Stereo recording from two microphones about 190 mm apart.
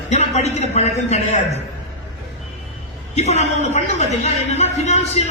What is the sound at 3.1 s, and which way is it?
A man's voice, 35° left (ahead or behind).